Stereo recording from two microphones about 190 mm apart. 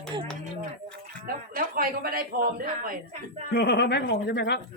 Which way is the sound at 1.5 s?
50° right (ahead or behind).